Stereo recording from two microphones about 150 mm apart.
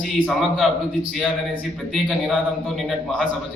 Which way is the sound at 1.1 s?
Centre (ahead or behind).